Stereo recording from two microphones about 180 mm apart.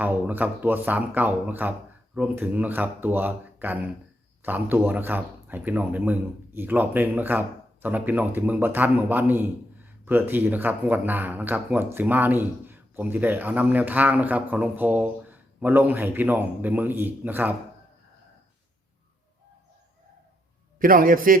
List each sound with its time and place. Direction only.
0.0 s speech: 10° right (ahead or behind)
20.7 s a man's voice: 50° right (ahead or behind)